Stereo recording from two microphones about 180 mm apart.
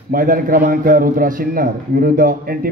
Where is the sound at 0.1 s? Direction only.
50° right (ahead or behind).